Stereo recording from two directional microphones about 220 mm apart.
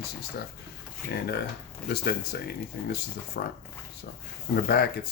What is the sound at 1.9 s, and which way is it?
Speech, 45° left (ahead or behind).